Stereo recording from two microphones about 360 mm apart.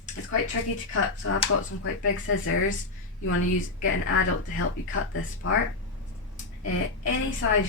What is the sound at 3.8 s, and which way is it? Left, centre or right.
Speech, left.